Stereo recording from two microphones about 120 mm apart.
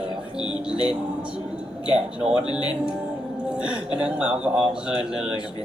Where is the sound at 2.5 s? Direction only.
35° left (ahead or behind).